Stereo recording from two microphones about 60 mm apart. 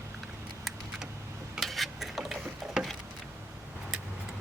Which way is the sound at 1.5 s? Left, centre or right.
Centre.